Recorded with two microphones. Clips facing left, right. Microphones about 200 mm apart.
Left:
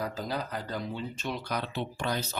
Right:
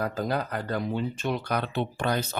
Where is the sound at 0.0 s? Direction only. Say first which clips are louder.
Right 5 dB; 55° right (ahead or behind).